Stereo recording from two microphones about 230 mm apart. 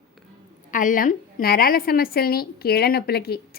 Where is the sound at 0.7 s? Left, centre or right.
Left.